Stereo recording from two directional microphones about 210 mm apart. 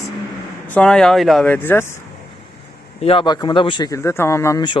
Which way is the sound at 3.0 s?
25° left (ahead or behind).